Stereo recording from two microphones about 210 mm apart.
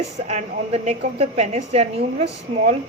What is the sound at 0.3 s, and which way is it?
A woman's voice, 30° right (ahead or behind).